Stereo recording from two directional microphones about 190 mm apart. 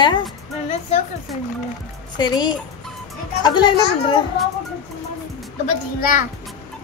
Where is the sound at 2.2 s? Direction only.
20° left (ahead or behind).